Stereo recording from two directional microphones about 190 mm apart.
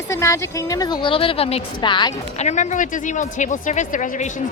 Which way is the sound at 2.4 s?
35° left (ahead or behind).